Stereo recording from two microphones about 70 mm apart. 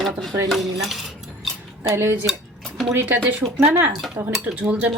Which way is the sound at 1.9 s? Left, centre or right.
Right.